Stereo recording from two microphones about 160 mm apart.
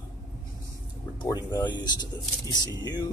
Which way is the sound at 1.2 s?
20° left (ahead or behind).